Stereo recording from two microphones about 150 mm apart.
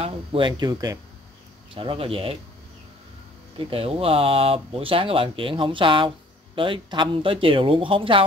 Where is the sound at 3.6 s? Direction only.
40° right (ahead or behind).